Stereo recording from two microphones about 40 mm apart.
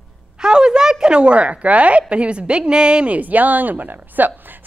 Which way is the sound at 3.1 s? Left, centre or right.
Right.